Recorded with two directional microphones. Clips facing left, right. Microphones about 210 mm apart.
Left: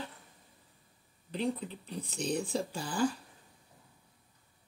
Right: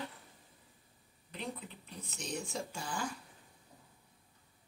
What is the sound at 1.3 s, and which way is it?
Speech, 35° left (ahead or behind).